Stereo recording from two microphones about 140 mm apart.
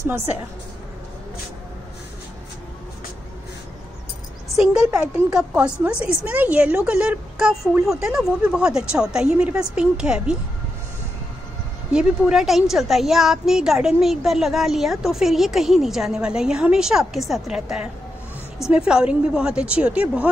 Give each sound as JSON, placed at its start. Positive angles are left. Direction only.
{"t": 0.0, "sound": "a woman's voice", "side_deg": -20}
{"t": 4.9, "sound": "a woman's voice", "side_deg": -10}
{"t": 11.9, "sound": "a woman's voice", "side_deg": -5}